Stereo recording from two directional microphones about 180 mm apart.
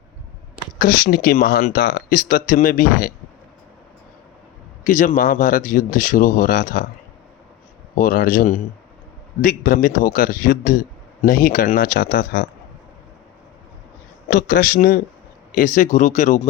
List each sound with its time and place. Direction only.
0.8 s speech: 50° left (ahead or behind)
4.9 s speech: 50° left (ahead or behind)
7.9 s speech: 50° left (ahead or behind)
14.3 s speech: 55° left (ahead or behind)